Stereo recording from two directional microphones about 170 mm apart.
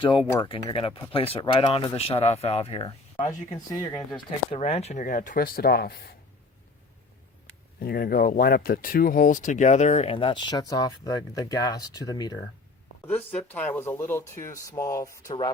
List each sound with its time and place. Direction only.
0.0 s speech: 30° left (ahead or behind)
4.5 s speech: 40° left (ahead or behind); by 6.1 s 65° left (ahead or behind)
7.8 s speech: 60° left (ahead or behind); by 12.4 s 20° left (ahead or behind)
13.1 s speech: 10° left (ahead or behind)